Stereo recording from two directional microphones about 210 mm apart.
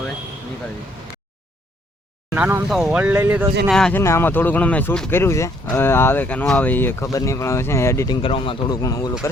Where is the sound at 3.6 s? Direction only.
Centre (ahead or behind).